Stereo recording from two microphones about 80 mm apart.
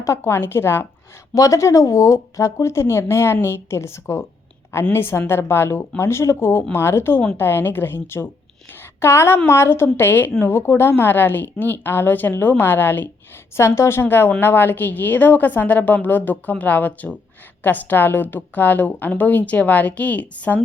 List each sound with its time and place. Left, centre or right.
0.0 s speech: left
1.4 s a woman's voice: left; by 20.6 s centre